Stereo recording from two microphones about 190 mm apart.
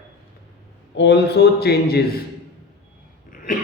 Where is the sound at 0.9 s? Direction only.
65° left (ahead or behind).